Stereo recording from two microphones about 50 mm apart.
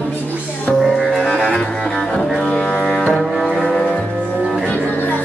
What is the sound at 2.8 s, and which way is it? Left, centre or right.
Music, centre.